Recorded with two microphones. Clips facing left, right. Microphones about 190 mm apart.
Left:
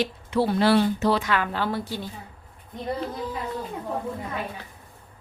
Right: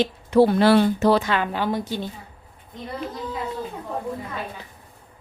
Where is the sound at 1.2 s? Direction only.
25° right (ahead or behind).